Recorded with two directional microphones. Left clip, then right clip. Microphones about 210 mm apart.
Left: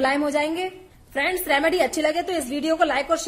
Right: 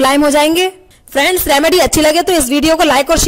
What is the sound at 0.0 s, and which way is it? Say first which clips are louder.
A woman's voice: right 12 dB; 55° right (ahead or behind).